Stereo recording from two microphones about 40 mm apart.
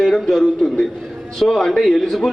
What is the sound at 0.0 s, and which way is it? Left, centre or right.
A man's voice, centre.